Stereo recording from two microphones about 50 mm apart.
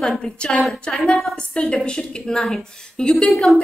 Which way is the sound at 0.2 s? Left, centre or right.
Centre.